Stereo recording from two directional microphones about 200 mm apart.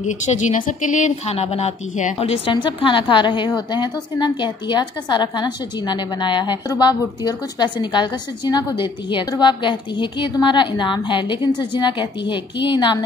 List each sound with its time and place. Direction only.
0.0 s speech: 35° left (ahead or behind)